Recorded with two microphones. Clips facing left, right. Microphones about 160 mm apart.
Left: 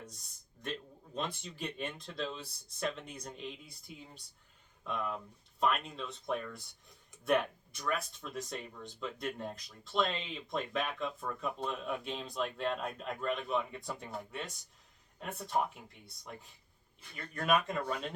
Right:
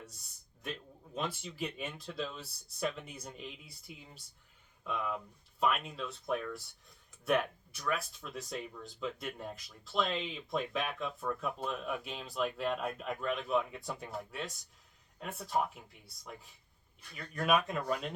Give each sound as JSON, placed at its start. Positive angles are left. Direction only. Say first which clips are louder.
{"t": 0.6, "sound": "speech", "louder": "left 1 dB", "side_deg": -5}